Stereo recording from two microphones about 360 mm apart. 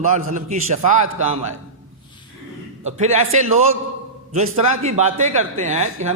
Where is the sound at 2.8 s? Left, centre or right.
Centre.